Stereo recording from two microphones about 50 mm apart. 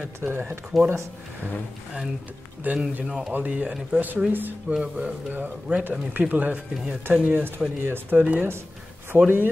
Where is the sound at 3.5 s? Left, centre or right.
Right.